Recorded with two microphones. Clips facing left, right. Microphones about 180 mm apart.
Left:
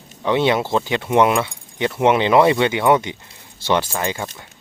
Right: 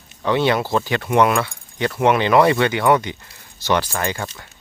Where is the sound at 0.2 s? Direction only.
20° left (ahead or behind).